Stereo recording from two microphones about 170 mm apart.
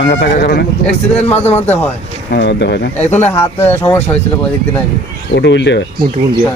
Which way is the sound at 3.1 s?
10° left (ahead or behind).